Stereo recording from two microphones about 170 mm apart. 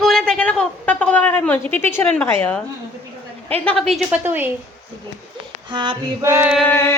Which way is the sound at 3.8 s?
Centre (ahead or behind).